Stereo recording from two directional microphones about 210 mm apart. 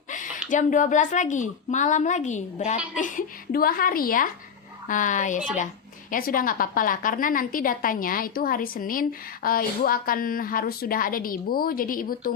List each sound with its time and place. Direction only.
0.5 s a woman's voice: 35° left (ahead or behind)